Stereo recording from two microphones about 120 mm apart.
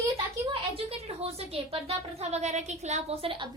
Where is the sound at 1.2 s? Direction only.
55° right (ahead or behind).